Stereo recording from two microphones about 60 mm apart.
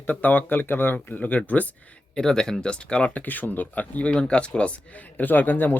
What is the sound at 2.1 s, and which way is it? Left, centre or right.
Speech, centre.